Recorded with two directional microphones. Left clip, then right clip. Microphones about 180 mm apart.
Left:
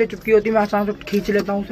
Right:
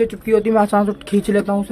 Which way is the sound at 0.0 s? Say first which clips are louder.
Even; 30° right (ahead or behind).